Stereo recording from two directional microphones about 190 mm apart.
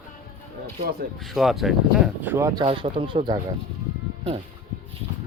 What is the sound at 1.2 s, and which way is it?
Speech, centre (ahead or behind).